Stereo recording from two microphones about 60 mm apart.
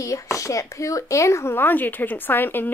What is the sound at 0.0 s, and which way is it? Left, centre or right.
Speech, left.